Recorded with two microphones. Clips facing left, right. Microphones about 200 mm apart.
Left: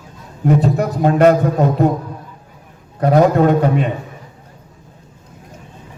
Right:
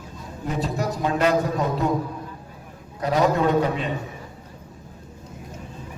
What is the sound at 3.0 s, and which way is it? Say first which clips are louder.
Speech: left 8 dB; 55° left (ahead or behind).